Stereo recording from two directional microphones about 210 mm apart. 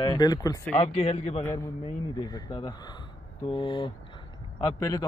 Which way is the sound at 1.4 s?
10° left (ahead or behind).